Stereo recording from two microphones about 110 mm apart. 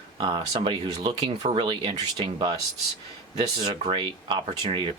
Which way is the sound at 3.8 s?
50° right (ahead or behind).